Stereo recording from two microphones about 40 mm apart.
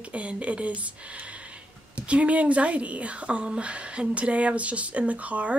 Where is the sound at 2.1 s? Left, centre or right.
Right.